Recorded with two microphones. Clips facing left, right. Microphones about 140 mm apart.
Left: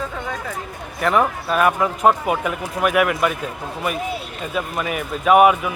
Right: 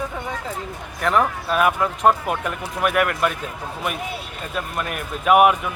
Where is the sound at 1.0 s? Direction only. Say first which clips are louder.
Left 2 dB; centre (ahead or behind).